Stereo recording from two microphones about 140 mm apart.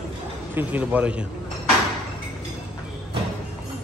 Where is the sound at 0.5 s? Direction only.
10° right (ahead or behind).